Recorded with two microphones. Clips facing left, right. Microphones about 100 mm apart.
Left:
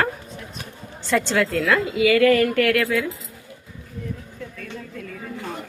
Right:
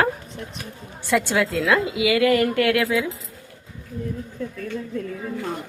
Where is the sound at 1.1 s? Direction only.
10° right (ahead or behind).